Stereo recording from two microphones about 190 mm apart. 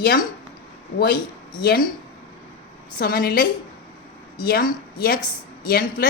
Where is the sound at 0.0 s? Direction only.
50° left (ahead or behind).